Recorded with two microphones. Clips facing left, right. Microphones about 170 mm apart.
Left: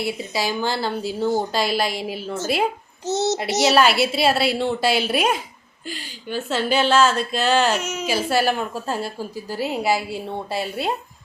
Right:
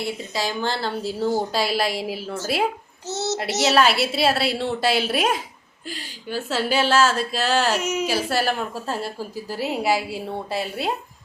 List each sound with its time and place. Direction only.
0.0 s a woman's voice: 10° left (ahead or behind)
3.1 s a child's voice: 15° left (ahead or behind)
3.6 s a woman's voice: centre (ahead or behind)